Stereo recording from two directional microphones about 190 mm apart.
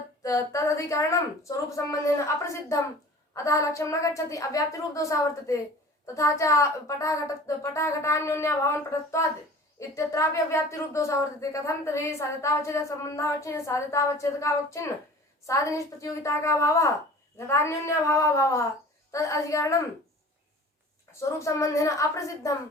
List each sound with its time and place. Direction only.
0.2 s speech: 15° left (ahead or behind)
9.9 s speech: 15° left (ahead or behind)
21.1 s speech: 15° left (ahead or behind)